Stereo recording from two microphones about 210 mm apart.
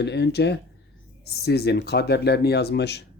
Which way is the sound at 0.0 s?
55° left (ahead or behind).